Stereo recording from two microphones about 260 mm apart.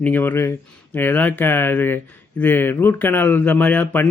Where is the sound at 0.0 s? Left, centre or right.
Centre.